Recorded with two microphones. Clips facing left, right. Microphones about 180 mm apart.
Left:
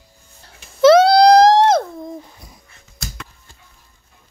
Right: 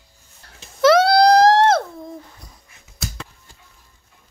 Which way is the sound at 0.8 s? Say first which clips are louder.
Left 4 dB; 20° left (ahead or behind).